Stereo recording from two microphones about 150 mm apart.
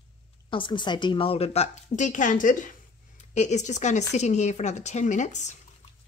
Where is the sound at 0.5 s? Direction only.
35° left (ahead or behind); by 2.7 s 60° left (ahead or behind).